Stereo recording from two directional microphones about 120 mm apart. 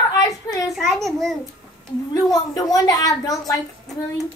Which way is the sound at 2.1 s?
30° left (ahead or behind).